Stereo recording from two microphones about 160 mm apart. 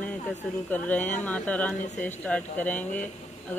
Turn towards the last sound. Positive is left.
turn(degrees=10)  # may be behind; listen again after turning